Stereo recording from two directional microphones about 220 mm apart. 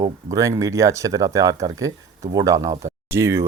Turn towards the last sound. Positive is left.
turn(degrees=-10)  # may be behind; listen again after turning